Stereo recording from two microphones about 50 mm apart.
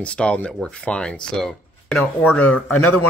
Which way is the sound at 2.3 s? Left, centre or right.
Left.